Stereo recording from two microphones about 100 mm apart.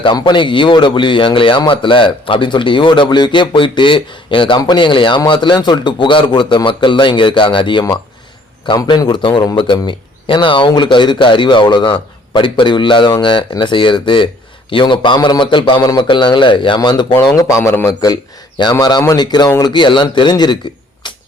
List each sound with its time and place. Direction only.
0.0 s a man's voice: 50° left (ahead or behind)
17.6 s a man's voice: 30° left (ahead or behind); by 20.6 s 45° left (ahead or behind)